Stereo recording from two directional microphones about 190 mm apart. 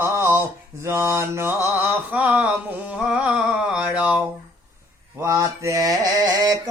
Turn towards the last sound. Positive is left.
turn(degrees=-20)  # may be behind; listen again after turning